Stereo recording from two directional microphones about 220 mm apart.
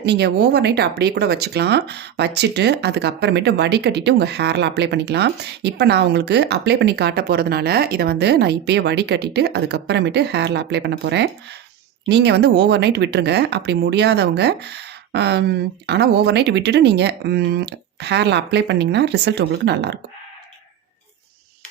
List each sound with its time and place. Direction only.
0.0 s speech: 50° right (ahead or behind)